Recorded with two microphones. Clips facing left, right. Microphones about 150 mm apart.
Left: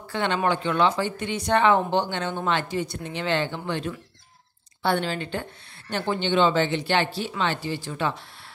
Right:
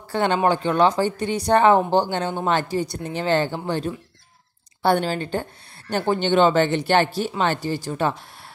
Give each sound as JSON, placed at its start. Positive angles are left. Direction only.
{"t": 0.1, "sound": "speech", "side_deg": -40}